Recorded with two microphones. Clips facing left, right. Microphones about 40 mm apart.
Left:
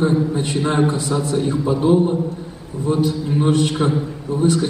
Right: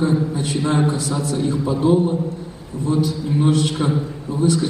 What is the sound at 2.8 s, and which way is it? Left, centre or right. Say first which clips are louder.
A man's voice: left 1 dB; left.